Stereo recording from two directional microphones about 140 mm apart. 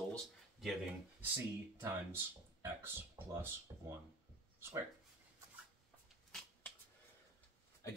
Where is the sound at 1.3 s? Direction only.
15° right (ahead or behind).